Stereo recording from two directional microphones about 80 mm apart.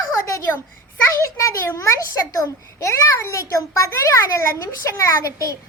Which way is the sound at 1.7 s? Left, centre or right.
Left.